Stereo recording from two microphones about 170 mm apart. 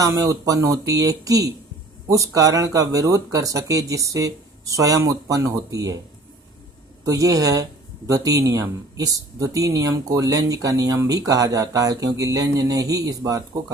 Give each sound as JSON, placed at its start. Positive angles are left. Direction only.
{"t": 0.0, "sound": "speech", "side_deg": -20}
{"t": 7.0, "sound": "speech", "side_deg": -20}